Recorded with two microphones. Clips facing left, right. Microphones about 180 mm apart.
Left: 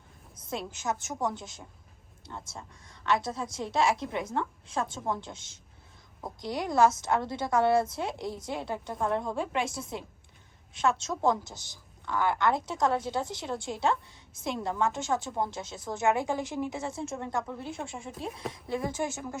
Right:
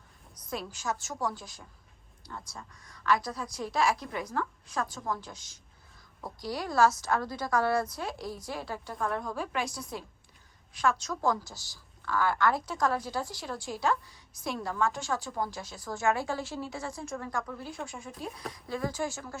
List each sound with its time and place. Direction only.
0.3 s a woman's voice: 25° left (ahead or behind)